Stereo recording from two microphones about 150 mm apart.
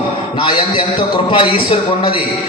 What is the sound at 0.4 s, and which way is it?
A man's voice, 30° left (ahead or behind).